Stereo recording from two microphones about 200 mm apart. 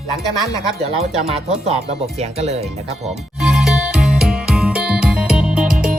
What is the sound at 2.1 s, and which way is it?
Speech, 35° right (ahead or behind).